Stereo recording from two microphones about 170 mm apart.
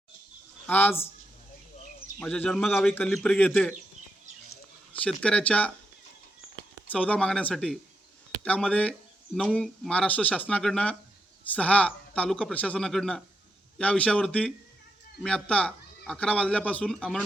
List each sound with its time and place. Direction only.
0.7 s speech: 10° left (ahead or behind)
2.1 s speech: 10° left (ahead or behind)
4.9 s speech: 5° left (ahead or behind)
6.9 s speech: 5° left (ahead or behind)